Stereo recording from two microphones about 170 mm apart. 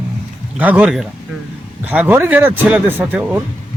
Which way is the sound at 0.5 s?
10° right (ahead or behind).